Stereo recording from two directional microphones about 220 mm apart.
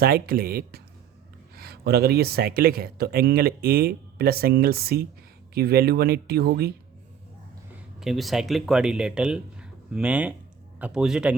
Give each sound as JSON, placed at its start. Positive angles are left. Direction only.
{"t": 0.0, "sound": "speech", "side_deg": -45}
{"t": 8.0, "sound": "speech", "side_deg": 0}